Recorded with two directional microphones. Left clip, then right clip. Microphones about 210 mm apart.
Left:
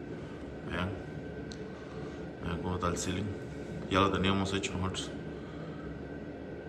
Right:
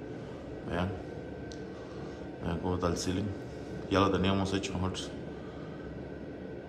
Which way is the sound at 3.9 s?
15° right (ahead or behind).